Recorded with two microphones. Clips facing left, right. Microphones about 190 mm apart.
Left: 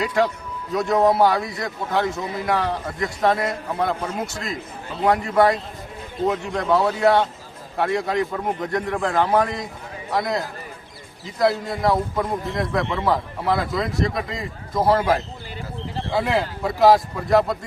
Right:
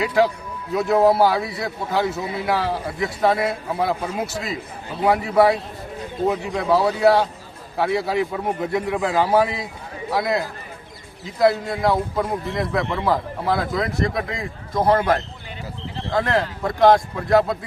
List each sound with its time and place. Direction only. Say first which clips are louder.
0.0 s a man's voice: right 2 dB; centre (ahead or behind)